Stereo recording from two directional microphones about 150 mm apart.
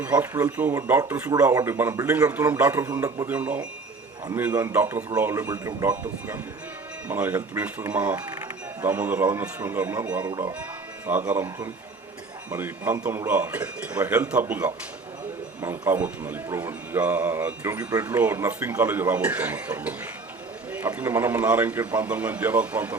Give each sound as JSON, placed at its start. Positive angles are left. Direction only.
{"t": 0.0, "sound": "a man's voice", "side_deg": -10}
{"t": 2.8, "sound": "speech", "side_deg": -25}
{"t": 3.2, "sound": "a man's voice", "side_deg": -10}
{"t": 12.5, "sound": "a man's voice", "side_deg": -15}